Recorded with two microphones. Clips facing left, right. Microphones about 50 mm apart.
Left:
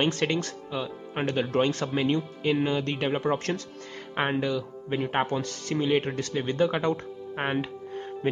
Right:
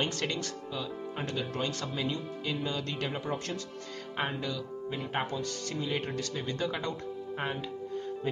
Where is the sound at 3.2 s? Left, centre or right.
Left.